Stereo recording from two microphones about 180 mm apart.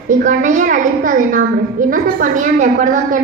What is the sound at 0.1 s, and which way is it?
A woman's voice, 45° right (ahead or behind).